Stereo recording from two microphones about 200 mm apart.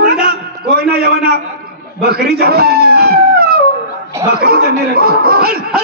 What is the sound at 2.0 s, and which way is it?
Cat, 50° right (ahead or behind).